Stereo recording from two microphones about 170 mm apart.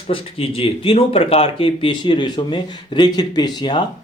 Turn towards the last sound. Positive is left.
turn(degrees=25)  # may be behind; listen again after turning